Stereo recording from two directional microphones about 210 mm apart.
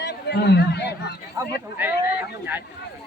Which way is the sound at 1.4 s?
10° right (ahead or behind).